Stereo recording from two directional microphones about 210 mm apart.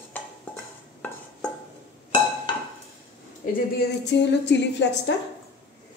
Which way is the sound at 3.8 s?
55° left (ahead or behind).